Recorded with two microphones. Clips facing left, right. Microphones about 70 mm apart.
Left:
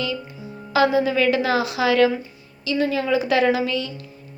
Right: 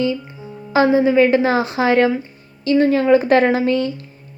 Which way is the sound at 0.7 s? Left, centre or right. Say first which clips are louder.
Right 4 dB; right.